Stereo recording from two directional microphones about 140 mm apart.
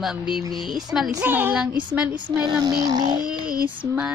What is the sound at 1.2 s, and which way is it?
Speech, 15° right (ahead or behind).